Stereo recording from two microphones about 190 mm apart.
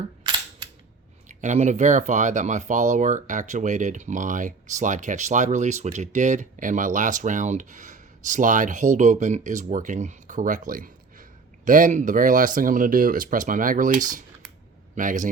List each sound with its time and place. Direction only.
1.3 s speech: 40° right (ahead or behind)
14.9 s a man's voice: 45° right (ahead or behind)